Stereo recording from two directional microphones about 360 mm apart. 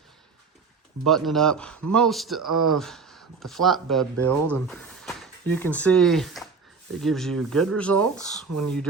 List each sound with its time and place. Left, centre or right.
1.0 s a man's voice: centre
2.4 s speech: right
2.6 s a man's voice: centre
8.4 s speech: right